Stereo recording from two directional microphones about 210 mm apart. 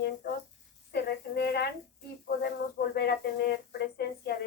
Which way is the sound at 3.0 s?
50° left (ahead or behind).